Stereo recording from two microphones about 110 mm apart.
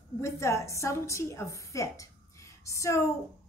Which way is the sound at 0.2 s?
25° left (ahead or behind).